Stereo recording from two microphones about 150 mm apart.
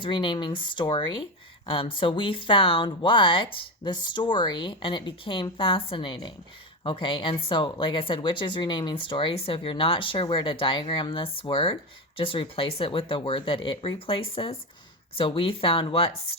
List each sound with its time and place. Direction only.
0.0 s speech: 35° left (ahead or behind)